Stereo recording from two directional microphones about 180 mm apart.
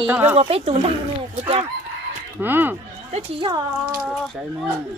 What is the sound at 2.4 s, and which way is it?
Speech, 10° right (ahead or behind).